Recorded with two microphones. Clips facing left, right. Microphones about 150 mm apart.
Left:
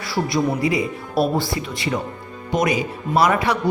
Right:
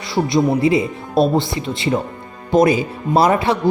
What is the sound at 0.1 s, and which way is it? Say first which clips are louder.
Speech: right 5 dB; 25° right (ahead or behind).